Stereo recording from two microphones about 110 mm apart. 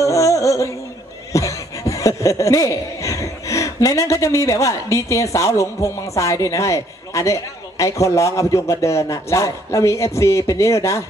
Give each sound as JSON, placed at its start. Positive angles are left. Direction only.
{"t": 0.0, "sound": "music", "side_deg": 30}
{"t": 1.3, "sound": "speech", "side_deg": 30}